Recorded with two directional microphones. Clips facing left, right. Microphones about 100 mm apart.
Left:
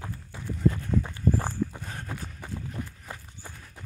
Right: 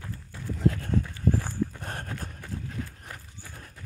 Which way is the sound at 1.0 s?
40° left (ahead or behind).